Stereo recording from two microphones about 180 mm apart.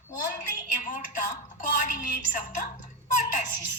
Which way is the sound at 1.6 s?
50° left (ahead or behind).